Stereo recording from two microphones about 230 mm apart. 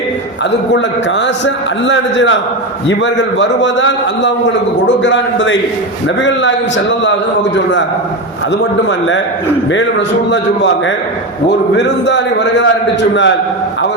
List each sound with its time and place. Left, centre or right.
1.5 s a man's voice: left
7.0 s a man's voice: left
8.9 s a man's voice: left
10.3 s a man's voice: left